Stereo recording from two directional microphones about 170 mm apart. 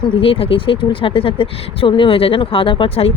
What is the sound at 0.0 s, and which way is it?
Speech, 35° left (ahead or behind).